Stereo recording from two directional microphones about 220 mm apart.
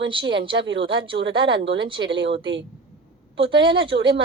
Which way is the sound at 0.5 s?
55° right (ahead or behind).